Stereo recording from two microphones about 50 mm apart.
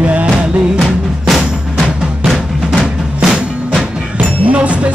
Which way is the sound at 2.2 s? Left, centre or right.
Centre.